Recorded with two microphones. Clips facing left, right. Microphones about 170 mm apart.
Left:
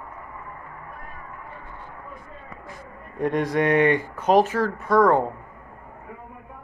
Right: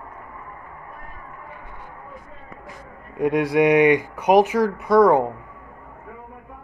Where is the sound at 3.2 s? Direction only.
10° right (ahead or behind).